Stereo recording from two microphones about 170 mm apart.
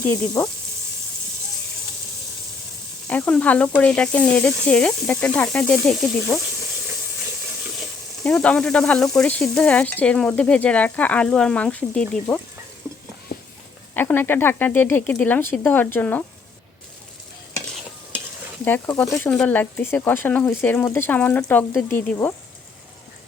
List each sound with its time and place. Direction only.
0.0 s sizzle: 10° left (ahead or behind)
3.1 s sizzle: 5° left (ahead or behind)
8.2 s sizzle: 5° left (ahead or behind)
13.3 s a sound: 60° left (ahead or behind)
13.9 s sizzle: 10° left (ahead or behind)
18.6 s sizzle: 10° left (ahead or behind)